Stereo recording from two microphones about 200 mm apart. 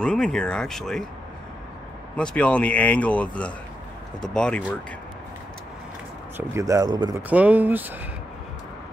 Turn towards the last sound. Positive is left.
turn(degrees=-10)  # may be behind; listen again after turning